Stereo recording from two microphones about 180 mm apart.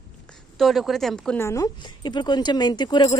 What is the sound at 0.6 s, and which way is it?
Speech, centre (ahead or behind).